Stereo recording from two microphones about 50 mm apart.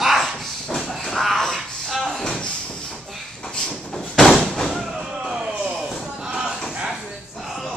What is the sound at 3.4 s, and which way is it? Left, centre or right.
Slam, centre.